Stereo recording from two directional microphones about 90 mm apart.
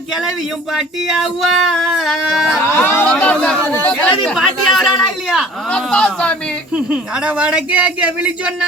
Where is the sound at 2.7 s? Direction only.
25° left (ahead or behind).